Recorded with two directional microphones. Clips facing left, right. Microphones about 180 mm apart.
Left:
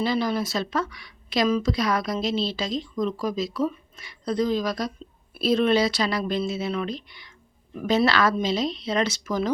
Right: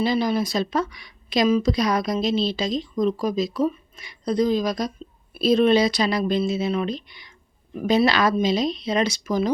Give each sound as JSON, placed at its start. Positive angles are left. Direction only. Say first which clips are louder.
{"t": 0.0, "sound": "a woman's voice", "louder": "right 3 dB", "side_deg": -15}